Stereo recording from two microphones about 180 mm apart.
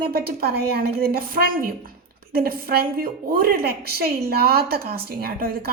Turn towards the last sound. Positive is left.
turn(degrees=-55)  # may be behind; listen again after turning